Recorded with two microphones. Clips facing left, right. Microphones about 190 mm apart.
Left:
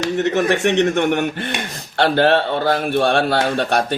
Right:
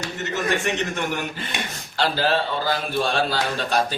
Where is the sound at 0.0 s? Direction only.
75° left (ahead or behind).